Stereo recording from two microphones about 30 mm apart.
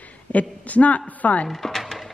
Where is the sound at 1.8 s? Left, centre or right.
Centre.